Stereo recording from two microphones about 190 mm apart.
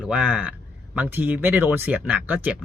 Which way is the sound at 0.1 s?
5° right (ahead or behind).